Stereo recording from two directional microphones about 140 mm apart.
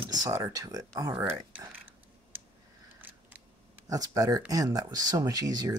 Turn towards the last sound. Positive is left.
turn(degrees=-25)  # may be behind; listen again after turning